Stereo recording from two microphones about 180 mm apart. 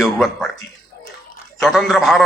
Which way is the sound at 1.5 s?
Centre (ahead or behind).